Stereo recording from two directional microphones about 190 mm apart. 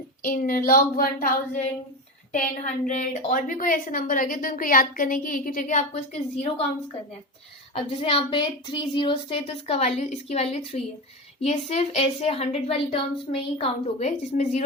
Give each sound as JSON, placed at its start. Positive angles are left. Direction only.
{"t": 0.2, "sound": "a woman's voice", "side_deg": 45}
{"t": 7.9, "sound": "a woman's voice", "side_deg": 30}